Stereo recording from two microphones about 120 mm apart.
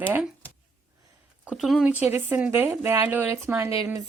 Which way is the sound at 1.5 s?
Centre (ahead or behind).